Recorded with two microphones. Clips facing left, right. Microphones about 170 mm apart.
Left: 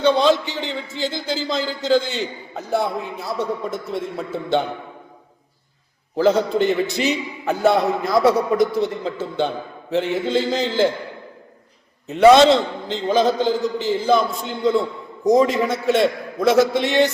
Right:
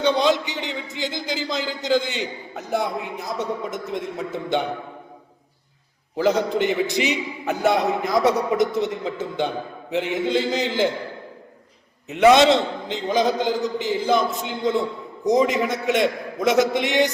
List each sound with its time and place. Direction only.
0.0 s a man's voice: 15° right (ahead or behind)
6.1 s a man's voice: 15° right (ahead or behind)
12.0 s a man's voice: 15° right (ahead or behind)